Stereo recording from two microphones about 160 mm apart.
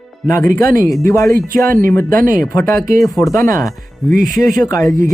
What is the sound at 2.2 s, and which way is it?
Speech, 60° right (ahead or behind).